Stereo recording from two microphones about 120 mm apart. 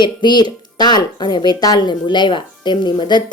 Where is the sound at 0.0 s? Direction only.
40° left (ahead or behind).